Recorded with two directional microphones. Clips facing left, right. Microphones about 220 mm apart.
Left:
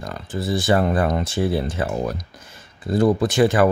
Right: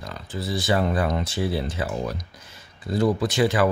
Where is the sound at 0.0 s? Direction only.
50° left (ahead or behind).